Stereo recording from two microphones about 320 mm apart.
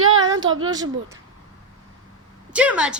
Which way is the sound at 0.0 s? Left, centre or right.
Right.